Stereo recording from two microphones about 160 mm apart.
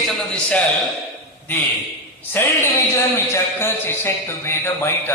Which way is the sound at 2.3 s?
15° left (ahead or behind).